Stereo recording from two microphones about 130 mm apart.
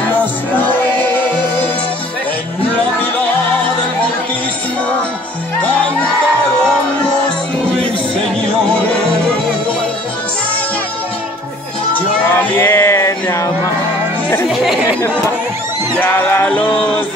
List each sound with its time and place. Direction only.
0.6 s music: 15° left (ahead or behind)
8.6 s music: 10° left (ahead or behind)
12.4 s music: 15° left (ahead or behind)
14.5 s speech: centre (ahead or behind)
16.0 s music: 15° left (ahead or behind)